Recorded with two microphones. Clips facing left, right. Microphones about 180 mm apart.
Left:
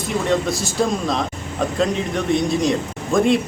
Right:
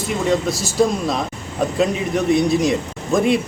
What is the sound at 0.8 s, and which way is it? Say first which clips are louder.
Speech: right 4 dB; 5° right (ahead or behind).